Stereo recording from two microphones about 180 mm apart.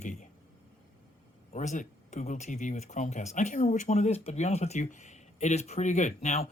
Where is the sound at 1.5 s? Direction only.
40° left (ahead or behind).